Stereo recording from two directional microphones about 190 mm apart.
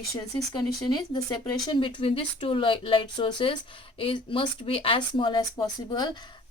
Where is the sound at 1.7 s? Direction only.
25° left (ahead or behind).